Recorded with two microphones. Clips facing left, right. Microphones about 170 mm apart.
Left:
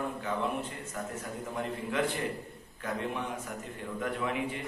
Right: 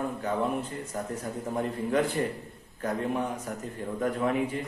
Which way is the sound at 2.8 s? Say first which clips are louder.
Right 5 dB; 40° right (ahead or behind).